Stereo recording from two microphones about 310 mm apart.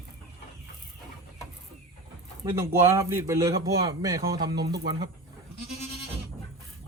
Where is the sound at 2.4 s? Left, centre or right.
Centre.